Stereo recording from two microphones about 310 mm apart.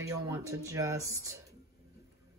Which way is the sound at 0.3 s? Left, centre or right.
Centre.